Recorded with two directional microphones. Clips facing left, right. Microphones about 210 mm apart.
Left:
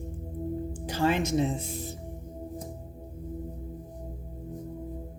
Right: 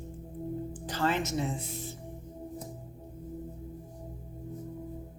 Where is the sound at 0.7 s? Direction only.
10° left (ahead or behind).